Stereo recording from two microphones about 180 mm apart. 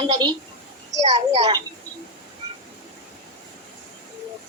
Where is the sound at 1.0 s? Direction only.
35° right (ahead or behind).